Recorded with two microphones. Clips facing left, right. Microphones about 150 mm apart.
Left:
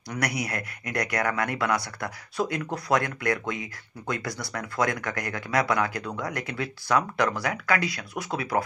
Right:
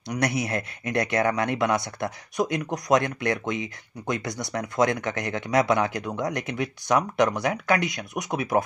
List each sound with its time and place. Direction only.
0.1 s speech: 25° right (ahead or behind)